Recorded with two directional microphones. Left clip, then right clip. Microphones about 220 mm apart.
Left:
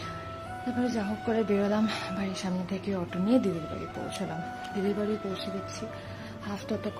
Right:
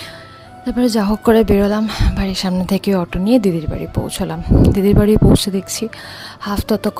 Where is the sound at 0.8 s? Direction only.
45° right (ahead or behind).